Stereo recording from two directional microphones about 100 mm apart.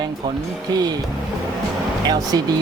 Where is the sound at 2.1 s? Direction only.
40° right (ahead or behind).